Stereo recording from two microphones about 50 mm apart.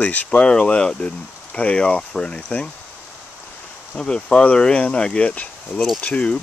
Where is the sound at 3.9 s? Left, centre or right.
Centre.